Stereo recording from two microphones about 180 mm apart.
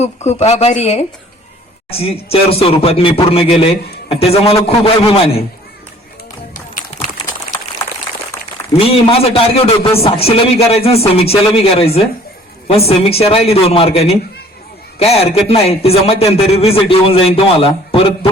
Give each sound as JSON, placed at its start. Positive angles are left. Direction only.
{"t": 0.0, "sound": "a man's voice", "side_deg": 35}
{"t": 8.8, "sound": "a man's voice", "side_deg": 30}